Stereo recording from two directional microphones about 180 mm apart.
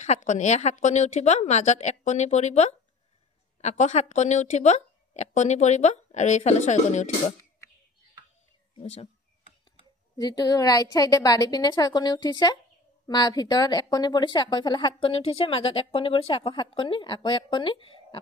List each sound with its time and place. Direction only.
0.0 s a woman's voice: 40° left (ahead or behind)
8.7 s a woman's voice: 35° left (ahead or behind)
10.1 s a woman's voice: 20° left (ahead or behind)